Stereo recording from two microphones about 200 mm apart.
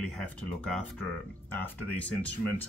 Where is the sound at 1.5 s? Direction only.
5° left (ahead or behind).